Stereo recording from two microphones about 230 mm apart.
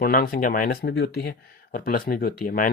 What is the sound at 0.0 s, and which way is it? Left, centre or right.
Speech, left.